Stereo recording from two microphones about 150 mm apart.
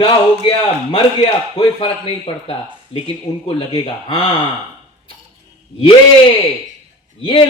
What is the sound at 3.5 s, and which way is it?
Speech, 40° left (ahead or behind).